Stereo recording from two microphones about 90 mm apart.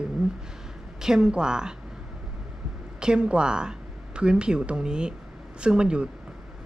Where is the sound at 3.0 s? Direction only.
10° right (ahead or behind).